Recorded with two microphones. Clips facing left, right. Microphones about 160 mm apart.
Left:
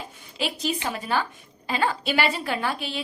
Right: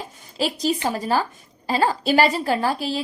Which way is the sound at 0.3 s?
40° right (ahead or behind).